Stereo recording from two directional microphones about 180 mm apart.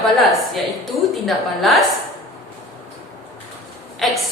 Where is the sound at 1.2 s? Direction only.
Centre (ahead or behind).